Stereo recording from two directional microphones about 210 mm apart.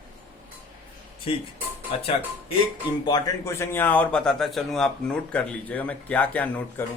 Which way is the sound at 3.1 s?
15° left (ahead or behind).